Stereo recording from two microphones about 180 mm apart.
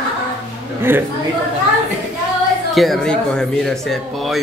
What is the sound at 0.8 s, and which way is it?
Speech, 10° right (ahead or behind).